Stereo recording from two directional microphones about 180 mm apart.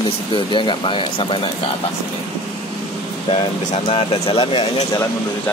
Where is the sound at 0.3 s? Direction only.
25° left (ahead or behind).